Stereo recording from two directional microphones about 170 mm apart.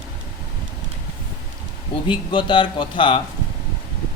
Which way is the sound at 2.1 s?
30° left (ahead or behind).